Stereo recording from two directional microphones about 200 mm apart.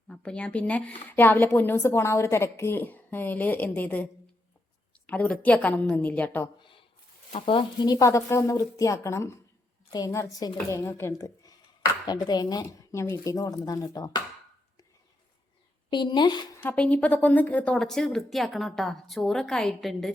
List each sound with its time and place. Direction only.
0.1 s a woman's voice: 5° left (ahead or behind)
7.3 s a woman's voice: 25° left (ahead or behind)
15.9 s speech: 25° left (ahead or behind)
16.6 s a woman's voice: 5° left (ahead or behind)